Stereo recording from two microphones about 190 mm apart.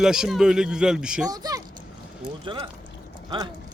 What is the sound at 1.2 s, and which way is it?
Speech, 20° right (ahead or behind).